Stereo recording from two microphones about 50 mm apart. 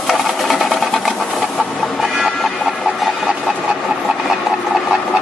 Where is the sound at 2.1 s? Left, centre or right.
Centre.